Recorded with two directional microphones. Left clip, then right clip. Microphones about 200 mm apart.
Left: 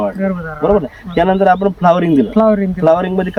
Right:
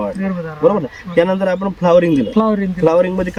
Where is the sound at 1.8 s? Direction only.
25° left (ahead or behind).